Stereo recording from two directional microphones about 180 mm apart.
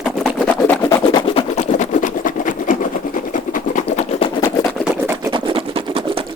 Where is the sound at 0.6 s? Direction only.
10° left (ahead or behind).